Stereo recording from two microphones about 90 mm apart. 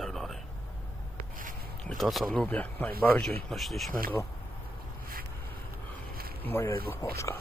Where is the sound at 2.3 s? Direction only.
15° left (ahead or behind).